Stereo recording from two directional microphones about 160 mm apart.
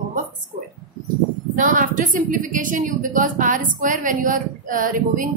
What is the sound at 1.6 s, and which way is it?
A woman's voice, 55° right (ahead or behind).